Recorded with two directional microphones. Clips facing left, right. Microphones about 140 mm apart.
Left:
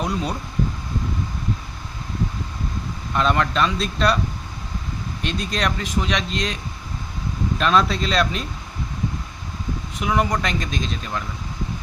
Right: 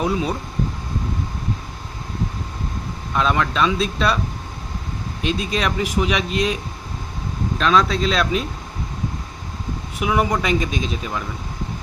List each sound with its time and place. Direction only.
0.0 s speech: 5° right (ahead or behind)
3.2 s speech: centre (ahead or behind)
5.2 s speech: 5° right (ahead or behind)
7.6 s speech: centre (ahead or behind)
10.0 s speech: 5° right (ahead or behind)